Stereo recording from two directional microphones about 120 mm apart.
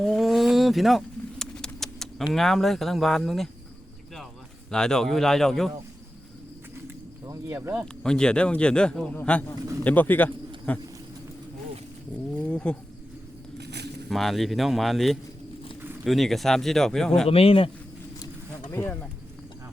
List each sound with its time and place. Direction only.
0.0 s a sound: centre (ahead or behind)
2.3 s speech: centre (ahead or behind)
4.7 s speech: 5° left (ahead or behind)
7.3 s speech: 25° right (ahead or behind)
8.0 s speech: 5° left (ahead or behind)
12.4 s wild animals: 10° left (ahead or behind)
14.1 s speech: centre (ahead or behind)
17.2 s speech: 55° left (ahead or behind)
18.7 s speech: 20° left (ahead or behind)